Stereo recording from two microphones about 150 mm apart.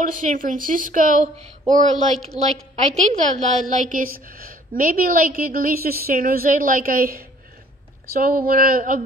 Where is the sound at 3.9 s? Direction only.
70° right (ahead or behind).